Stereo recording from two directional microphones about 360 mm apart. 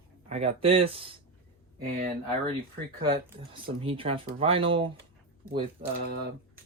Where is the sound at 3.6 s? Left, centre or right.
Centre.